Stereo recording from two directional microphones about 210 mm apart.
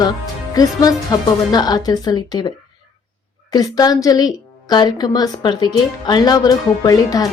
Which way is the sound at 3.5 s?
20° left (ahead or behind).